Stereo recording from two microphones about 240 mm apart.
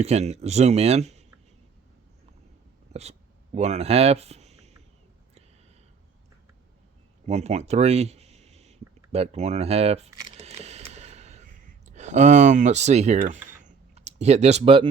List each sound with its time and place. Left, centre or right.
0.0 s speech: right
2.9 s a sound: right
7.3 s speech: right
9.1 s camera: right